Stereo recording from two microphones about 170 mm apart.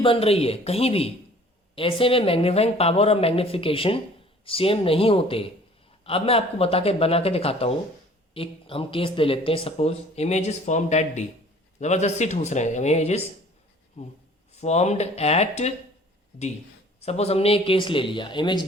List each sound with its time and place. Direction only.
0.0 s speech: 35° left (ahead or behind)
17.0 s speech: 40° left (ahead or behind)